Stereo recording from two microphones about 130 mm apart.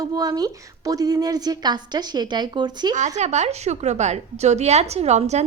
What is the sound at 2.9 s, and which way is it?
A woman's voice, 65° right (ahead or behind).